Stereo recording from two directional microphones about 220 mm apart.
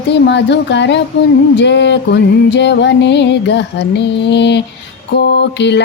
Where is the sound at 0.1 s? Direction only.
55° left (ahead or behind).